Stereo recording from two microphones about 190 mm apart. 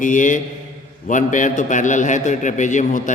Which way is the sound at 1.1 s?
40° left (ahead or behind).